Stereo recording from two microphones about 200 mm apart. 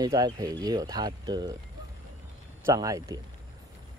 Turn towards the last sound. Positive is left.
turn(degrees=-15)  # may be behind; listen again after turning